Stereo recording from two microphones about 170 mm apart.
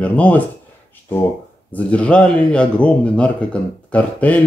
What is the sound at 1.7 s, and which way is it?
Speech, 5° left (ahead or behind).